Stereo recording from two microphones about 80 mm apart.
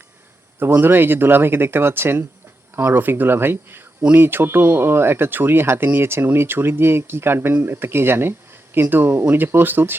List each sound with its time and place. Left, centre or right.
0.6 s speech: right